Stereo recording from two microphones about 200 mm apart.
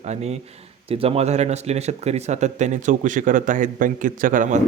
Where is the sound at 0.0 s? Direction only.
35° right (ahead or behind).